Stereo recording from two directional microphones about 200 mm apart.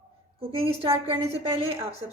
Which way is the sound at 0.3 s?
30° right (ahead or behind).